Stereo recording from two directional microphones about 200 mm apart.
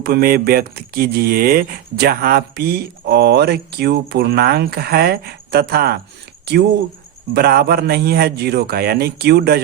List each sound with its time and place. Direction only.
0.0 s speech: 50° right (ahead or behind)
7.3 s speech: 50° right (ahead or behind)